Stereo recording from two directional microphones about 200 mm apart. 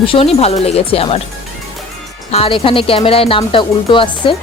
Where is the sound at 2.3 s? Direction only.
25° left (ahead or behind).